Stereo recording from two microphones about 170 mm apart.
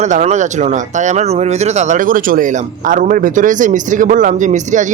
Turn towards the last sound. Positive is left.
turn(degrees=-45)  # may be behind; listen again after turning